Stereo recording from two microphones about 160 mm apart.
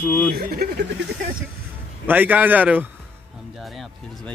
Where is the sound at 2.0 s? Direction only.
10° right (ahead or behind).